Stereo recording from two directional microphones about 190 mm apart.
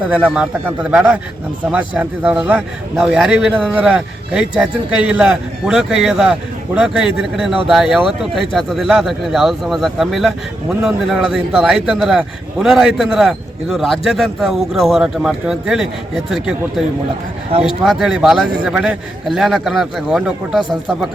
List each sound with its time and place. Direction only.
0.1 s a man's voice: 5° right (ahead or behind)
17.5 s speech: 30° right (ahead or behind)
17.8 s a man's voice: centre (ahead or behind)